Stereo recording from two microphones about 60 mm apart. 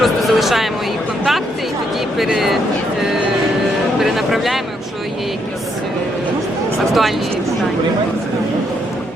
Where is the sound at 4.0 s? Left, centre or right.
Centre.